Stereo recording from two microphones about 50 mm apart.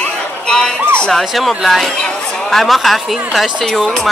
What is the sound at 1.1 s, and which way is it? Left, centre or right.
Speech, centre.